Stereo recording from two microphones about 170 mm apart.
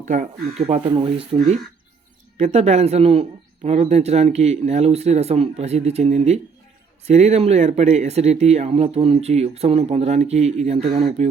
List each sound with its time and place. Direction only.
0.0 s a man's voice: 50° right (ahead or behind); by 1.4 s 30° right (ahead or behind)
2.4 s a man's voice: 40° right (ahead or behind)